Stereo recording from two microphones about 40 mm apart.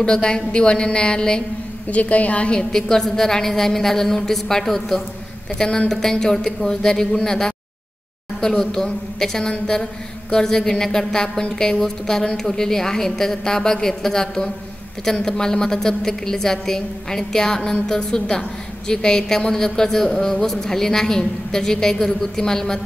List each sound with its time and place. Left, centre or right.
0.0 s a woman's voice: centre
1.9 s a woman's voice: left
2.5 s a woman's voice: centre